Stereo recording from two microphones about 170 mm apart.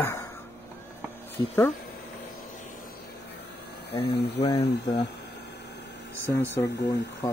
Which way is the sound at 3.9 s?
75° left (ahead or behind).